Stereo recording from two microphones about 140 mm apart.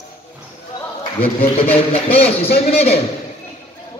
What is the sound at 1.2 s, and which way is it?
Speech, 45° left (ahead or behind).